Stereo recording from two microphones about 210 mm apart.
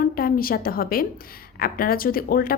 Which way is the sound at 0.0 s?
45° left (ahead or behind).